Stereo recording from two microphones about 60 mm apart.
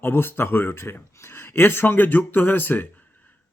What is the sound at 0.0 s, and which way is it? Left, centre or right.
Speech, left.